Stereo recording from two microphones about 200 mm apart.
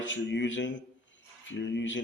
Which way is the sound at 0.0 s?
65° left (ahead or behind).